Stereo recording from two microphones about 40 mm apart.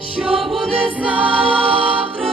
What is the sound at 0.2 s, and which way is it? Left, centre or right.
Music, right.